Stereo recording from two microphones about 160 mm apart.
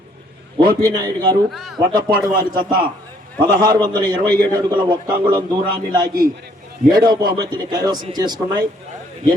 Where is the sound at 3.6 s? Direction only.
25° right (ahead or behind).